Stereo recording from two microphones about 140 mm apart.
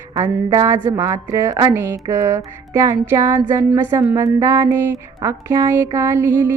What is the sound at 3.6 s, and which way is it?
Speech, 10° right (ahead or behind).